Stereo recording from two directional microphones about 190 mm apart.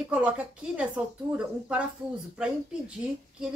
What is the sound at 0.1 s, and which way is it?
Speech, 5° right (ahead or behind).